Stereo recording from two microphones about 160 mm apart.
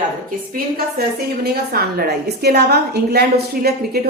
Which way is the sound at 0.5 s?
75° right (ahead or behind).